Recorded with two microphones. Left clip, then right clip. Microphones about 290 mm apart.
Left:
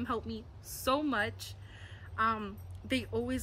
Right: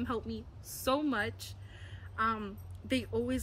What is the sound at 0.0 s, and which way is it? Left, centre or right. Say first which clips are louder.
Speech: left 1 dB; centre.